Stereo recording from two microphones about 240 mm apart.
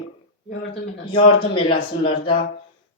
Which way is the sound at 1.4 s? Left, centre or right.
Left.